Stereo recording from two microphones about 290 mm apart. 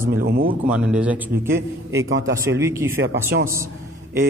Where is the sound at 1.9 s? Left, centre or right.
Right.